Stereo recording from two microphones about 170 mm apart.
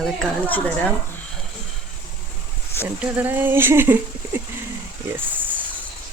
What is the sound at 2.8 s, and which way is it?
Speech, 10° right (ahead or behind).